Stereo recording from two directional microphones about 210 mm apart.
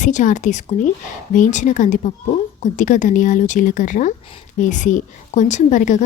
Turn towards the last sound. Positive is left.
turn(degrees=35)  # may be behind; listen again after turning